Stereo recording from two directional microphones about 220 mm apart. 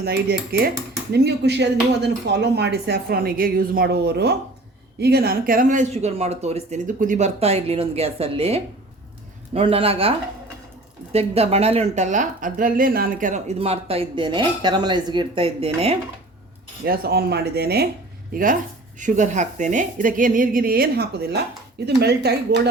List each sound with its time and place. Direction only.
0.0 s a woman's voice: 45° right (ahead or behind); by 16.0 s 25° right (ahead or behind)
16.8 s speech: 45° right (ahead or behind)
18.9 s speech: 35° right (ahead or behind)